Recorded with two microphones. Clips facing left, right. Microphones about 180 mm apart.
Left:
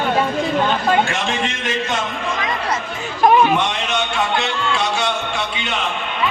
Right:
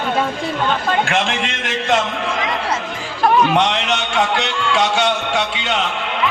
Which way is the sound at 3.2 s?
15° left (ahead or behind).